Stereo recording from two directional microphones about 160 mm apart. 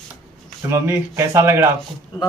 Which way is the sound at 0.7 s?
15° right (ahead or behind).